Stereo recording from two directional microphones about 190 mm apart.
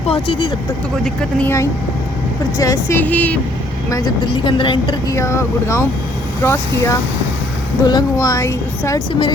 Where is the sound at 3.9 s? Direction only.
20° left (ahead or behind).